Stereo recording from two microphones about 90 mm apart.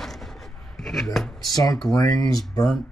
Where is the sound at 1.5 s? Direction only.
45° left (ahead or behind).